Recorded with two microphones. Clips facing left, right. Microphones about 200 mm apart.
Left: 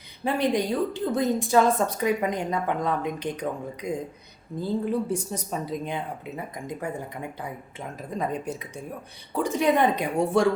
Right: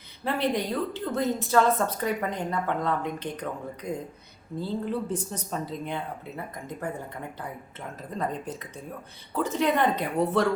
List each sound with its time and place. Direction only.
0.3 s a woman's voice: 15° left (ahead or behind)
8.1 s a woman's voice: 10° left (ahead or behind)